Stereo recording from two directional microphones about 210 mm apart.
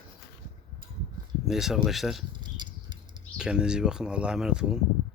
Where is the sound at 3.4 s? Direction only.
5° right (ahead or behind).